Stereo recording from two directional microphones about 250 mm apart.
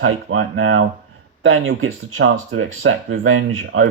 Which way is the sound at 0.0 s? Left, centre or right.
Right.